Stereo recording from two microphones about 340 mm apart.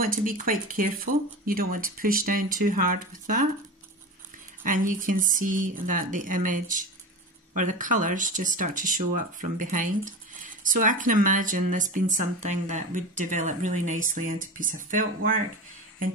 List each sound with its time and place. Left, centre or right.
0.0 s speech: right
4.6 s speech: right